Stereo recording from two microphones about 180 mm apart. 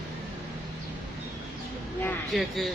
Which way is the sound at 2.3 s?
Centre (ahead or behind).